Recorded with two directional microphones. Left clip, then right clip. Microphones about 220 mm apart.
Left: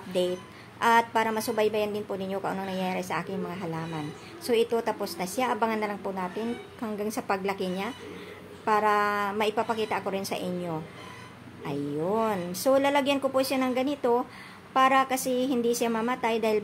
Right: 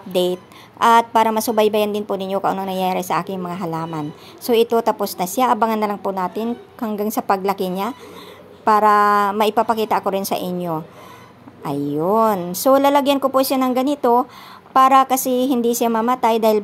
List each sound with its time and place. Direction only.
0.1 s a woman's voice: 35° right (ahead or behind)